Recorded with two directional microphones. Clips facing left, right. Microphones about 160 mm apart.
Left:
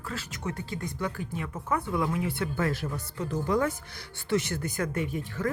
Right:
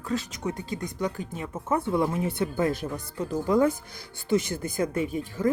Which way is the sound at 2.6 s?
20° right (ahead or behind).